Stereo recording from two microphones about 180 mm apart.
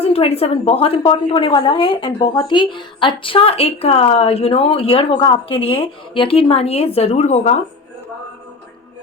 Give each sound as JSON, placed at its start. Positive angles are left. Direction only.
{"t": 0.0, "sound": "a woman's voice", "side_deg": 35}